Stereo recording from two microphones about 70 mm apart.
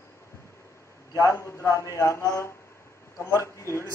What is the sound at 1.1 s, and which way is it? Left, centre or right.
A man's voice, left.